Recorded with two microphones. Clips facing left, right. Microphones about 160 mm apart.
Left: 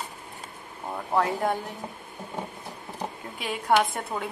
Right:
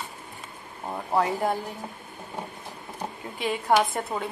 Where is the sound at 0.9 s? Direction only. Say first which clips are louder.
Right 1 dB; 5° right (ahead or behind).